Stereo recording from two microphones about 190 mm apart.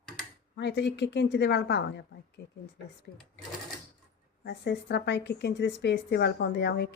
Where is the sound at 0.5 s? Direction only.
65° left (ahead or behind).